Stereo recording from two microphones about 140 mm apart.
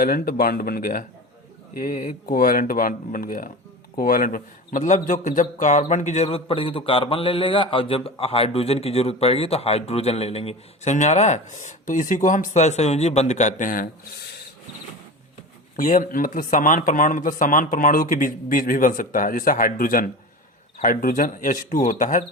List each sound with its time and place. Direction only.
0.0 s a man's voice: 90° left
1.8 s speech: 75° left (ahead or behind); by 10.9 s 45° left (ahead or behind)
10.9 s speech: 55° left (ahead or behind); by 13.9 s 75° left (ahead or behind)
15.7 s speech: 70° left (ahead or behind)